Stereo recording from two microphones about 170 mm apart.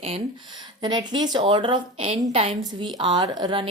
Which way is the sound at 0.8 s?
25° right (ahead or behind).